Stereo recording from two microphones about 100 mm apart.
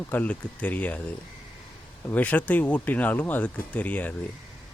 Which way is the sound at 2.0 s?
15° left (ahead or behind).